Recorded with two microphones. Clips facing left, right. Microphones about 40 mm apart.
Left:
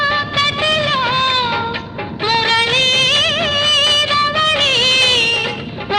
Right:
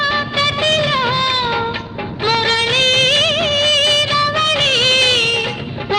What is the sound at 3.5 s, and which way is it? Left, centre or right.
Music, right.